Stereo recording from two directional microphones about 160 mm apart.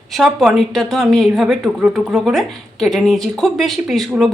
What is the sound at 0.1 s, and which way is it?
Speech, centre (ahead or behind).